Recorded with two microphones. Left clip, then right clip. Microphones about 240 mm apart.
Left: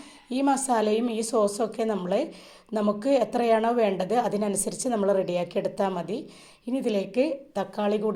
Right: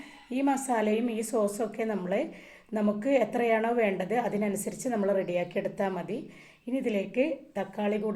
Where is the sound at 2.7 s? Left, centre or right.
Left.